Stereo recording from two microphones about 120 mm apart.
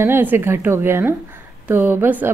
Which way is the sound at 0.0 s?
20° right (ahead or behind).